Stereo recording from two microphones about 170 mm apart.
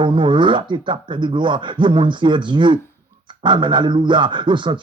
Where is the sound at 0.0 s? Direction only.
30° right (ahead or behind).